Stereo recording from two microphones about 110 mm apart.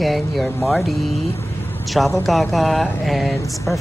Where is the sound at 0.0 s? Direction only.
Centre (ahead or behind).